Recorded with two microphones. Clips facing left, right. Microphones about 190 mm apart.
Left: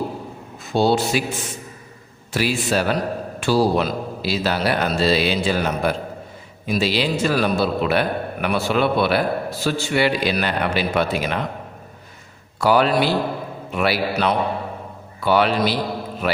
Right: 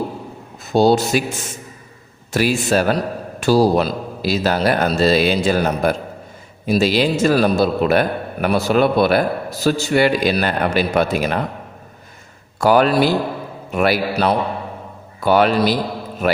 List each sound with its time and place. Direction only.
0.7 s a man's voice: 40° right (ahead or behind)
2.3 s a man's voice: 45° right (ahead or behind)
12.5 s a man's voice: 45° right (ahead or behind)
14.1 s a man's voice: 35° right (ahead or behind)
15.2 s a man's voice: 45° right (ahead or behind)